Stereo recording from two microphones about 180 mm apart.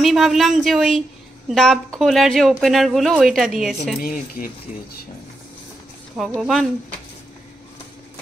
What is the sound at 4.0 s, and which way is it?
Speech, 50° left (ahead or behind).